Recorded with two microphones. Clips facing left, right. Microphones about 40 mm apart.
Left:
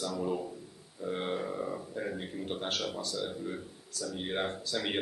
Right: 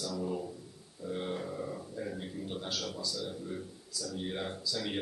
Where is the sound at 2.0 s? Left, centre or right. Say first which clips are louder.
Left 1 dB; left.